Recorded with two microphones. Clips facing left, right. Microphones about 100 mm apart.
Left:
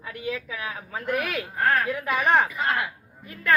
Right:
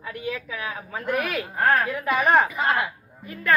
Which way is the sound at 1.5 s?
30° right (ahead or behind).